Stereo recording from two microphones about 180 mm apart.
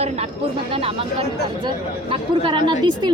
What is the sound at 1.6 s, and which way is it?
Speech, 25° right (ahead or behind).